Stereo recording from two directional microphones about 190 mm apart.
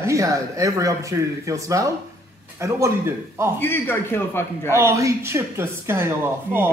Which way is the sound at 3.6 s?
10° left (ahead or behind).